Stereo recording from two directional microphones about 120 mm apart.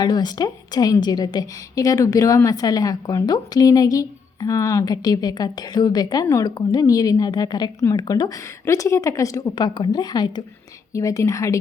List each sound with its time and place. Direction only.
0.0 s a woman's voice: 35° left (ahead or behind)